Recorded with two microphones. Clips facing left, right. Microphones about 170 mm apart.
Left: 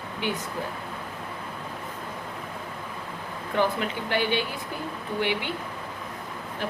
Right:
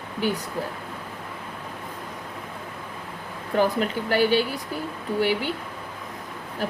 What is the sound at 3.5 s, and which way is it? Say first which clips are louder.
Speech: right 3 dB; 40° right (ahead or behind).